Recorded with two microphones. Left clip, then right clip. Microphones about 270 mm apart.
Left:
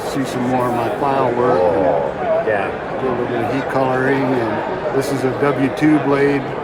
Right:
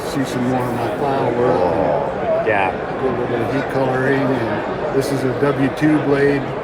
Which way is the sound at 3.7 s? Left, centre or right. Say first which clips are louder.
Left 1 dB; centre.